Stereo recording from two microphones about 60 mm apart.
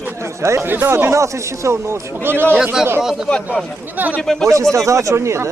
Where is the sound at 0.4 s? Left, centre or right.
Right.